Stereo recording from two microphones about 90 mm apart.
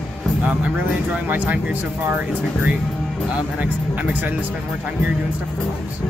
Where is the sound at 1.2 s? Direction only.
20° right (ahead or behind).